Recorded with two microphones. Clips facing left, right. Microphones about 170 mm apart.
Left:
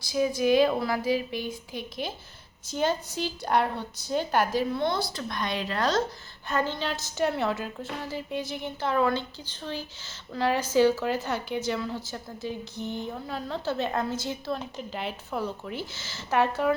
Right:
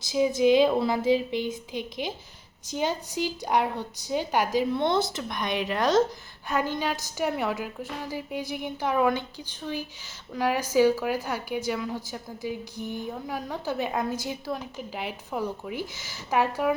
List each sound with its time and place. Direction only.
0.1 s a woman's voice: 20° right (ahead or behind)